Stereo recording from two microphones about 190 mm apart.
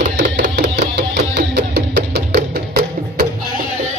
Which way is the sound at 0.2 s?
65° right (ahead or behind).